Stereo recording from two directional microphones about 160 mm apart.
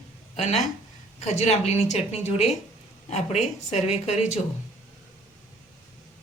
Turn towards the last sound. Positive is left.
turn(degrees=45)  # may be behind; listen again after turning